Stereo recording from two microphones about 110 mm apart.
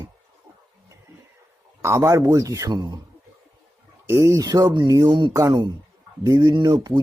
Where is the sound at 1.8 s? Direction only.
25° right (ahead or behind).